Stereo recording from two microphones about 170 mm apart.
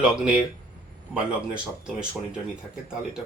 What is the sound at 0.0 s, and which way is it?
Speech, 5° right (ahead or behind).